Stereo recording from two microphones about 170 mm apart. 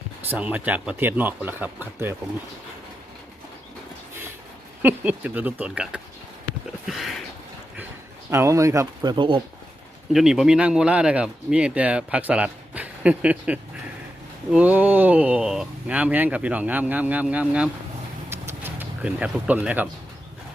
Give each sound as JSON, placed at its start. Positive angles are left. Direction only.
{"t": 0.3, "sound": "speech", "side_deg": -10}
{"t": 4.8, "sound": "speech", "side_deg": -10}
{"t": 6.8, "sound": "a sound", "side_deg": 0}
{"t": 8.3, "sound": "speech", "side_deg": -15}
{"t": 10.1, "sound": "speech", "side_deg": 0}
{"t": 18.3, "sound": "a sound", "side_deg": -15}